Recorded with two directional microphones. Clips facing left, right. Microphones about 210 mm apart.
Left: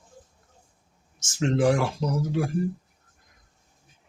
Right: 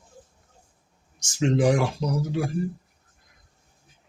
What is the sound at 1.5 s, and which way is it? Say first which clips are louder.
Speech: even; 15° right (ahead or behind).